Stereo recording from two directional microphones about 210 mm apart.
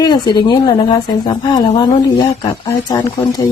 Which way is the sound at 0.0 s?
20° left (ahead or behind).